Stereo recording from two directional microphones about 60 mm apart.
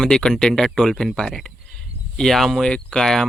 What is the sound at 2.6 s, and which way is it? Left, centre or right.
Speech, centre.